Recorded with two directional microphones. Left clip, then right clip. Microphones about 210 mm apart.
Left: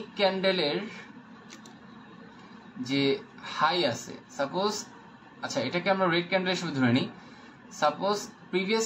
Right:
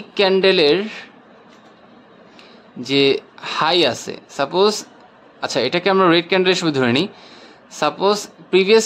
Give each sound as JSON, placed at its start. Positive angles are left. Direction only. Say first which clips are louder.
{"t": 0.1, "sound": "speech", "louder": "right 11 dB", "side_deg": -55}
{"t": 2.9, "sound": "speech", "louder": "right 12 dB", "side_deg": -55}